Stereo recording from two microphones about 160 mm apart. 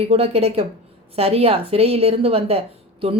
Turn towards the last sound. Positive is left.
turn(degrees=-35)  # may be behind; listen again after turning